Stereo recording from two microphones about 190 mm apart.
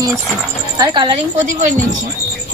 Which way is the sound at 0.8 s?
25° right (ahead or behind).